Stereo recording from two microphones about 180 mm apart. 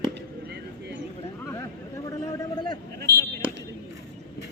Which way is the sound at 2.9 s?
65° right (ahead or behind).